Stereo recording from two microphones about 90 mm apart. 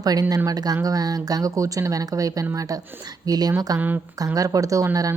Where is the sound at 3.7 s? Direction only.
20° right (ahead or behind).